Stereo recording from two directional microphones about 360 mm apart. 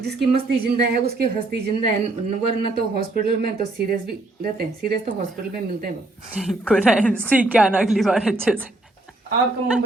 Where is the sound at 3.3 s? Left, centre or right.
Right.